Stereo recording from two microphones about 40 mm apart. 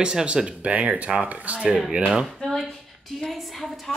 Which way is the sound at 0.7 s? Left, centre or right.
Right.